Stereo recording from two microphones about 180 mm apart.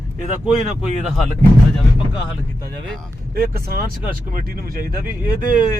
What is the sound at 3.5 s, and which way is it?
Speech, 55° right (ahead or behind).